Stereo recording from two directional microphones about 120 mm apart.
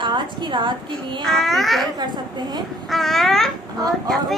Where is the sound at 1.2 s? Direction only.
Centre (ahead or behind).